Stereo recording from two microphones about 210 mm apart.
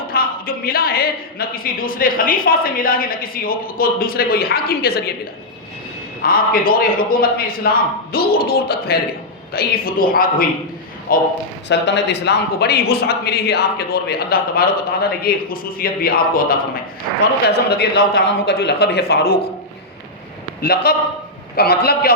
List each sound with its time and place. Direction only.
0.1 s speech: 45° left (ahead or behind)
6.2 s speech: 45° left (ahead or behind)
11.7 s speech: 55° left (ahead or behind)
20.6 s speech: 45° left (ahead or behind)